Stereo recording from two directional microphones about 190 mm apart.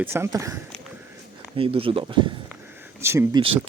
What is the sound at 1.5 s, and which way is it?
Speech, 30° right (ahead or behind).